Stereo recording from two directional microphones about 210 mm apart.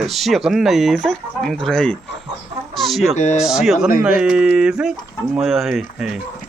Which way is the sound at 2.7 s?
Centre (ahead or behind).